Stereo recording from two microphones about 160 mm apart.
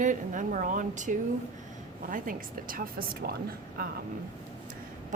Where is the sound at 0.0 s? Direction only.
55° right (ahead or behind).